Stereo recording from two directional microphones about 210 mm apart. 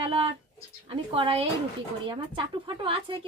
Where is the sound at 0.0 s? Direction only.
25° right (ahead or behind).